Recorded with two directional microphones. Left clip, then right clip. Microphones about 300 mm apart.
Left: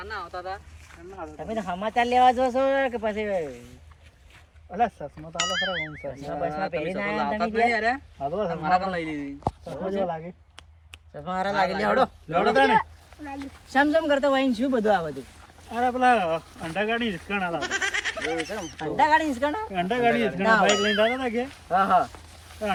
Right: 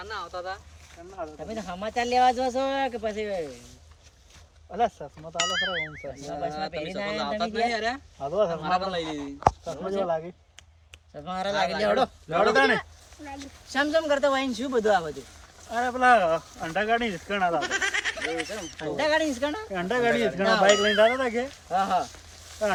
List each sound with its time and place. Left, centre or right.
1.4 s speech: centre
4.7 s speech: centre
5.4 s speech: centre
8.2 s speech: right
8.4 s speech: centre
13.2 s speech: centre
19.7 s speech: centre
21.0 s speech: centre
21.5 s speech: centre